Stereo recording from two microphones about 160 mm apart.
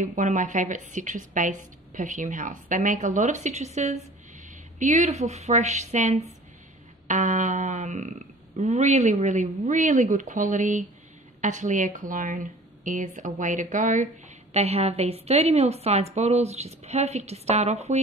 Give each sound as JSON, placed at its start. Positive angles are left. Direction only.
{"t": 0.0, "sound": "a woman's voice", "side_deg": -50}
{"t": 14.5, "sound": "a woman's voice", "side_deg": -40}